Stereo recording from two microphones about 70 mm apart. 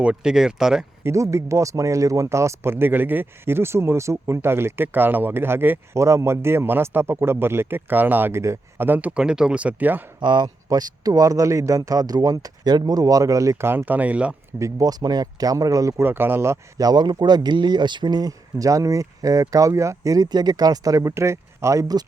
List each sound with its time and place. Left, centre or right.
0.0 s speech: centre
1.0 s a man's voice: right
6.0 s a man's voice: right
9.1 s speech: centre
10.2 s speech: right
13.7 s speech: right
14.6 s speech: right
16.0 s a man's voice: right
16.7 s speech: right
20.1 s speech: right
21.2 s speech: right